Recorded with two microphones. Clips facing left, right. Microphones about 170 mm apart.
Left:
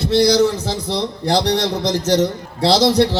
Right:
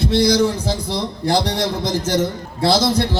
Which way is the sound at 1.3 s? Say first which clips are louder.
Left 3 dB; 55° right (ahead or behind).